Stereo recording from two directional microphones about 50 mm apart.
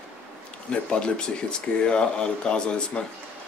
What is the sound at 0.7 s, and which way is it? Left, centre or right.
Speech, centre.